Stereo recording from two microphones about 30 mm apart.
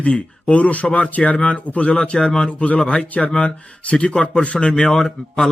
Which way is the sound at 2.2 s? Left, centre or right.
Centre.